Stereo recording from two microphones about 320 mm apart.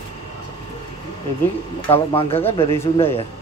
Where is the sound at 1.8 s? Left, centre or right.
Centre.